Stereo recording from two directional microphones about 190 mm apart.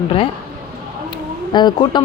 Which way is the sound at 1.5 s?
25° left (ahead or behind).